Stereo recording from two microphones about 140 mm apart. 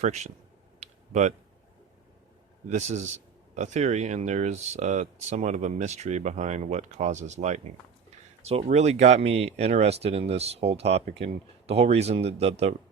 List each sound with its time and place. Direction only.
0.0 s a man's voice: 55° right (ahead or behind)
0.8 s a sound: 55° right (ahead or behind)
2.6 s a man's voice: 55° right (ahead or behind)